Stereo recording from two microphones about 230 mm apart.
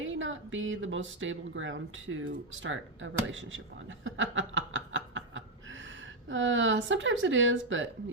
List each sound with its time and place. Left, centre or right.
0.0 s speech: right
4.0 s snicker: right
6.2 s speech: right